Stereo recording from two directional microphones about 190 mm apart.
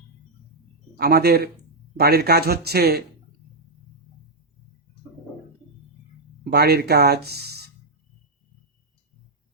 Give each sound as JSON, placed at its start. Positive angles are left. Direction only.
{"t": 0.9, "sound": "speech", "side_deg": -55}
{"t": 6.4, "sound": "speech", "side_deg": -55}